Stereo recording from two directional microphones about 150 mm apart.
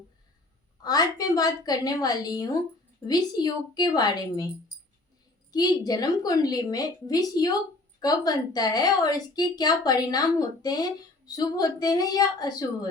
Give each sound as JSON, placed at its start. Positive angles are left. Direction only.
{"t": 0.8, "sound": "a woman's voice", "side_deg": 25}